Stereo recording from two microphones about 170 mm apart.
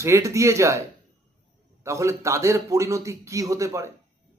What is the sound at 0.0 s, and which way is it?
Speech, 15° right (ahead or behind).